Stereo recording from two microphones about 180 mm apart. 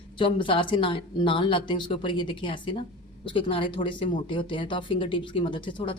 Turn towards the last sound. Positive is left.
turn(degrees=30)  # may be behind; listen again after turning